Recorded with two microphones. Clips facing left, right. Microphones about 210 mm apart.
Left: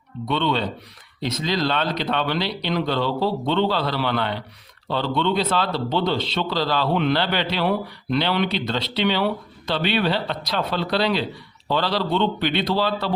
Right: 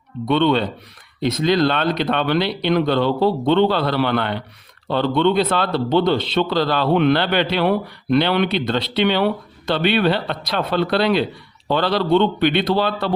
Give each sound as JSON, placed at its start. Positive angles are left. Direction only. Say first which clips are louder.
{"t": 0.3, "sound": "a man's voice", "louder": "right 6 dB", "side_deg": -55}